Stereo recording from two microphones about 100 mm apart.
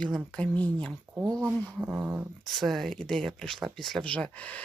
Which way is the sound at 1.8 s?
15° right (ahead or behind).